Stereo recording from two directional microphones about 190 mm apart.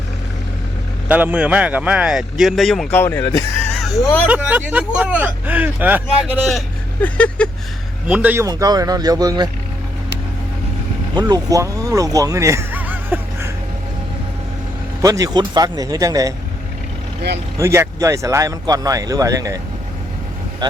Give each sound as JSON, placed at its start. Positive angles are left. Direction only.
{"t": 1.0, "sound": "speech", "side_deg": -10}
{"t": 3.0, "sound": "a sound", "side_deg": 10}
{"t": 3.9, "sound": "a sound", "side_deg": 15}
{"t": 4.3, "sound": "speech", "side_deg": -10}
{"t": 7.0, "sound": "a sound", "side_deg": 5}
{"t": 8.0, "sound": "speech", "side_deg": -5}
{"t": 11.1, "sound": "speech", "side_deg": -20}
{"t": 15.0, "sound": "speech", "side_deg": -15}
{"t": 17.6, "sound": "speech", "side_deg": -15}